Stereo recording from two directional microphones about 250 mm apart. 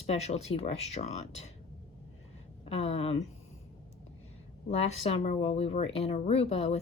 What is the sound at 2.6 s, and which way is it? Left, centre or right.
Speech, left.